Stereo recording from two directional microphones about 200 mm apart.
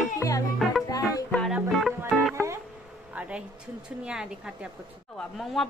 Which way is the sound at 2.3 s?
15° right (ahead or behind).